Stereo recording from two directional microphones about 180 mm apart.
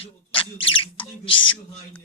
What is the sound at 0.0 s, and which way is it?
Speech, 30° left (ahead or behind).